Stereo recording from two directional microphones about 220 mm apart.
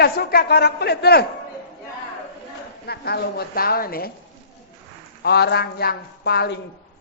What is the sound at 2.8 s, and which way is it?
A man's voice, 45° left (ahead or behind).